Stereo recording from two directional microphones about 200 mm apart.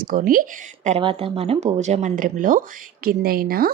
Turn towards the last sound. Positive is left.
turn(degrees=-45)  # may be behind; listen again after turning